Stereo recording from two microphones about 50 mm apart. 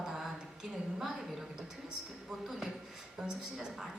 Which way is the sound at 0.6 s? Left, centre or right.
Centre.